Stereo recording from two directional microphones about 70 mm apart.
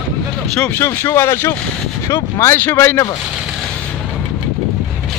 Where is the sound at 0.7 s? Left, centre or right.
Left.